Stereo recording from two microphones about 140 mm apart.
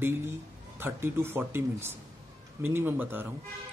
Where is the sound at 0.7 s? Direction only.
15° right (ahead or behind).